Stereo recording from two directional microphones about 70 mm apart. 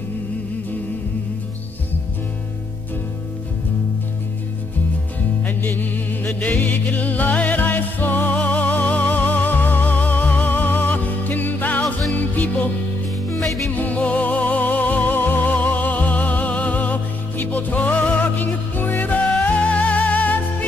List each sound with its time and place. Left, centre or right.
5.4 s music: left
13.7 s music: left